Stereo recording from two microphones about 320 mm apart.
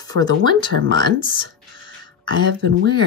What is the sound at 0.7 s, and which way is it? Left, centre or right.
Speech, right.